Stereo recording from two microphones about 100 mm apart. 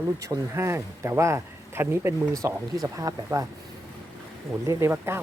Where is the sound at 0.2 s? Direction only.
30° right (ahead or behind).